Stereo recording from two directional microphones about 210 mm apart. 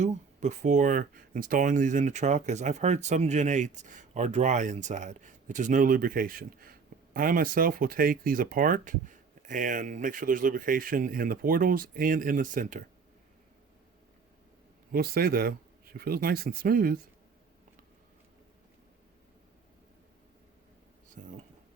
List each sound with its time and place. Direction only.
0.0 s speech: 35° right (ahead or behind)
14.9 s speech: 45° right (ahead or behind)
21.2 s speech: 40° right (ahead or behind)